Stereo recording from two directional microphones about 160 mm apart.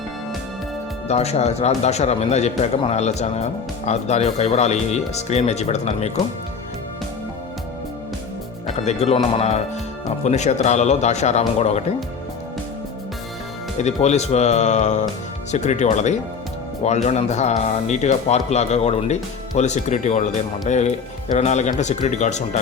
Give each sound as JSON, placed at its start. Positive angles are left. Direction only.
{"t": 1.0, "sound": "speech", "side_deg": 40}
{"t": 8.6, "sound": "speech", "side_deg": 45}
{"t": 13.8, "sound": "speech", "side_deg": 45}